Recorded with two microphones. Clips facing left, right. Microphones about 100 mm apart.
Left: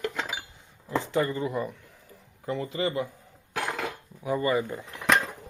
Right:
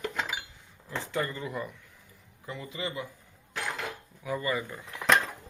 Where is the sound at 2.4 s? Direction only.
45° left (ahead or behind).